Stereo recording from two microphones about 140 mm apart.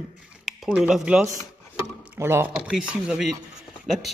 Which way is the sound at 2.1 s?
15° right (ahead or behind).